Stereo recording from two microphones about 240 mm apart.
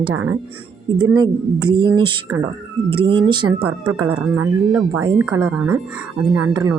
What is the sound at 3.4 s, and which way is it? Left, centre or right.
Speech, right.